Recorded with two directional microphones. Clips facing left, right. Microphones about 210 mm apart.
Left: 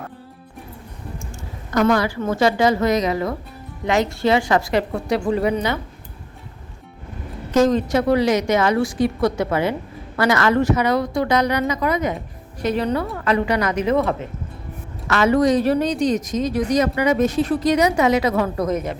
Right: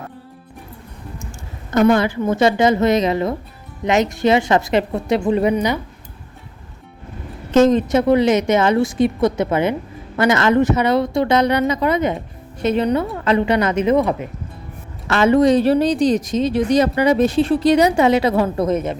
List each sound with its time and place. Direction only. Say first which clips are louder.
1.7 s speech: right 3 dB; 25° right (ahead or behind)
7.5 s speech: right 3 dB; 20° right (ahead or behind)
15.0 s speech: right 3 dB; 25° right (ahead or behind)